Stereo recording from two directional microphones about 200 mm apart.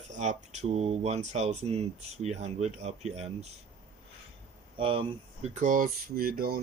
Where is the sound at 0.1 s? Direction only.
35° right (ahead or behind).